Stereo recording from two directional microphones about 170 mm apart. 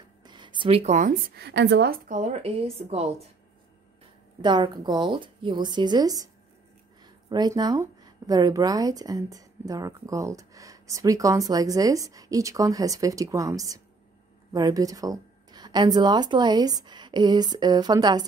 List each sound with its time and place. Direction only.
0.2 s a sound: 25° right (ahead or behind); by 1.1 s 45° right (ahead or behind)
1.3 s a woman's voice: 80° right
2.0 s speech: 45° right (ahead or behind)
4.4 s speech: 25° right (ahead or behind)